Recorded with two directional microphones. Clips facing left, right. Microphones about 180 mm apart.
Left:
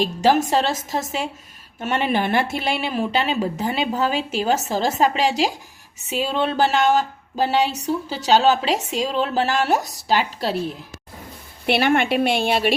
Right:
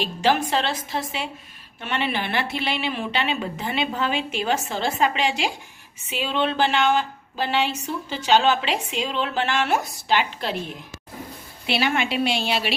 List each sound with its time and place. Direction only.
0.0 s a woman's voice: 45° left (ahead or behind)
11.6 s a woman's voice: 55° left (ahead or behind)